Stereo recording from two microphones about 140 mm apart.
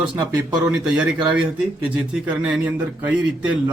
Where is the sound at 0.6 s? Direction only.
5° right (ahead or behind).